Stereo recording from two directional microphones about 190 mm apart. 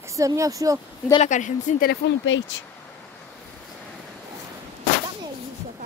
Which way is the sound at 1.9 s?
80° left.